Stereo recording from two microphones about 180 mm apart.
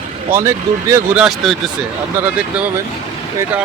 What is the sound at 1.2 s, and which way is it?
Speech, centre (ahead or behind).